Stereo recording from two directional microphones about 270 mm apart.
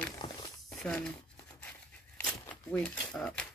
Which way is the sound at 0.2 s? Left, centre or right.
Left.